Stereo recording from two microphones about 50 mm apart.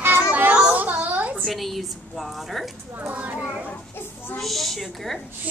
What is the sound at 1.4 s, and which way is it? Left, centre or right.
A woman's voice, centre.